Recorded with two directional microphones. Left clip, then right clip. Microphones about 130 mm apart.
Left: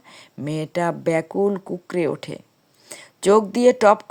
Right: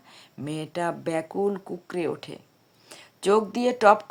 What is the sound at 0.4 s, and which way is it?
Speech, 35° left (ahead or behind).